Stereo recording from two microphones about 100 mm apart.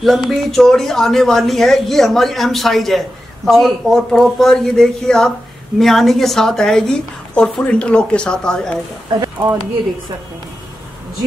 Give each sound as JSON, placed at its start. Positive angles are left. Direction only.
{"t": 0.0, "sound": "a woman's voice", "side_deg": 0}
{"t": 9.2, "sound": "speech", "side_deg": -40}